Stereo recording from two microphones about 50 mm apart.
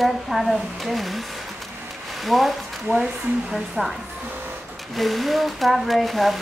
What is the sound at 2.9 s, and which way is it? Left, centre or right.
Speech, right.